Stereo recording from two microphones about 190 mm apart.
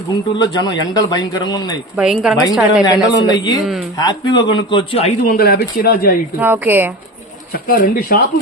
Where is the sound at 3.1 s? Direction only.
20° left (ahead or behind).